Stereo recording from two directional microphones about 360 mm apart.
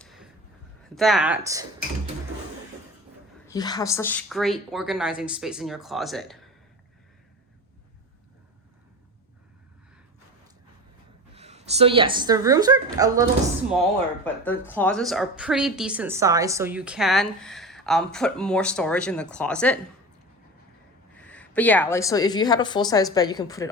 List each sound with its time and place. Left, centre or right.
0.0 s a sound: centre
0.9 s a woman's voice: centre
3.4 s a woman's voice: centre
11.3 s a woman's voice: centre
14.3 s a woman's voice: centre
21.2 s a woman's voice: centre